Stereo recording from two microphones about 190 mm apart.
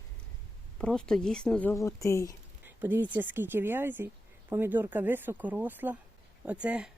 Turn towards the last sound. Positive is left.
turn(degrees=-5)  # may be behind; listen again after turning